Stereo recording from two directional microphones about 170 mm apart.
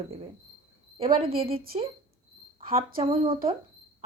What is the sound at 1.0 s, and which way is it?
Speech, 60° right (ahead or behind).